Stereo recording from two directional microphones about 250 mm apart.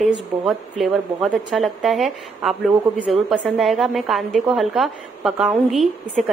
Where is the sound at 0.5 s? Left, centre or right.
Centre.